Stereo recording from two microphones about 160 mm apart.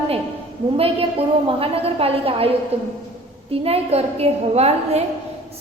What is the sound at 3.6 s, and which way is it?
A woman's voice, 40° right (ahead or behind).